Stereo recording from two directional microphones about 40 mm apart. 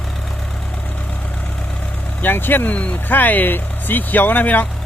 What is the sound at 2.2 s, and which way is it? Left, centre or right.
Speech, left.